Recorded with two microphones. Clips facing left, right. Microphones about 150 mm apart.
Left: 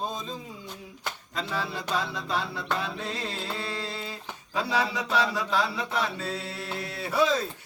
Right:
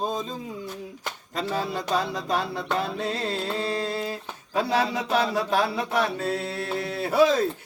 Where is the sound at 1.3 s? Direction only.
45° right (ahead or behind).